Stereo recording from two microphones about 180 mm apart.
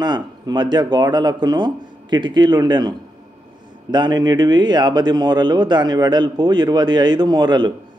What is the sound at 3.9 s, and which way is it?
Speech, 25° right (ahead or behind).